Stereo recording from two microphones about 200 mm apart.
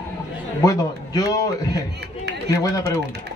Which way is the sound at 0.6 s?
15° left (ahead or behind).